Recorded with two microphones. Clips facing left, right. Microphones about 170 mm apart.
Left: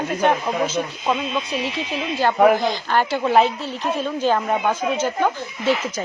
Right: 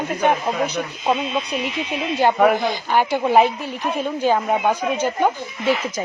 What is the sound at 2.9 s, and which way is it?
Speech, 15° right (ahead or behind).